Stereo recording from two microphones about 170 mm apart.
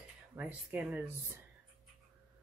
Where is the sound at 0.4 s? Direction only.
10° right (ahead or behind).